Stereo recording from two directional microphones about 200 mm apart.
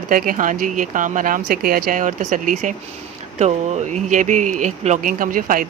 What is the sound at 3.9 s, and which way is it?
Speech, 40° right (ahead or behind).